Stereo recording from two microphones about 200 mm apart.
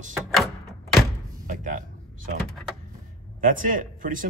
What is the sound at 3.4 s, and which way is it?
Speech, 40° right (ahead or behind).